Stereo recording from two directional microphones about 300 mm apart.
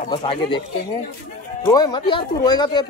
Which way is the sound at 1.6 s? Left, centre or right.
Centre.